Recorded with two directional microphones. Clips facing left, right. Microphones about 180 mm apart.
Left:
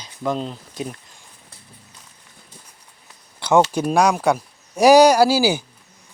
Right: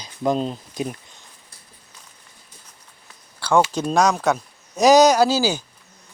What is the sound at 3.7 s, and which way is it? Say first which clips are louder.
Speech: left 1 dB; 10° left (ahead or behind).